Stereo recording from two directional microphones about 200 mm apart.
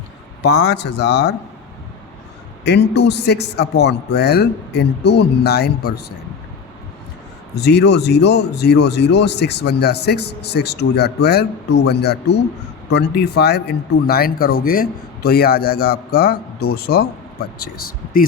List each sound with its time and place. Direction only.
0.4 s speech: 55° left (ahead or behind)
2.6 s speech: 60° left (ahead or behind)
7.5 s speech: 55° left (ahead or behind)